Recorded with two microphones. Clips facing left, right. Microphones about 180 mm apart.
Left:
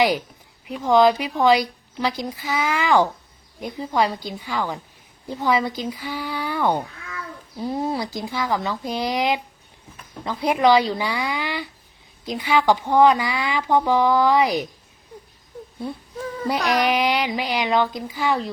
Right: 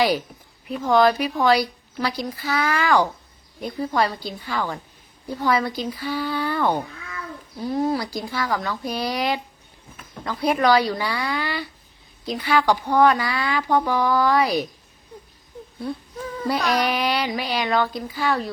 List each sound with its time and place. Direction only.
0.7 s speech: 15° left (ahead or behind)
16.5 s speech: 20° left (ahead or behind)